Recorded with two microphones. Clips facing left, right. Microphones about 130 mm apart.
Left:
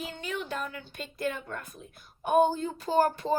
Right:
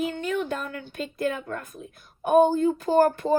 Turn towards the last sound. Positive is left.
turn(degrees=-50)  # may be behind; listen again after turning